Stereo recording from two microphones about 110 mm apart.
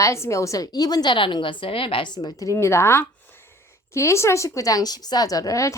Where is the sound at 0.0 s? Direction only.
25° left (ahead or behind); by 2.0 s 55° left (ahead or behind).